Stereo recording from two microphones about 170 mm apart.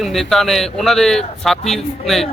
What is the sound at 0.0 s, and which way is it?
A man's voice, centre (ahead or behind).